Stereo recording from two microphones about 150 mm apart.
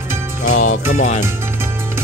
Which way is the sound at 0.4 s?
55° left (ahead or behind).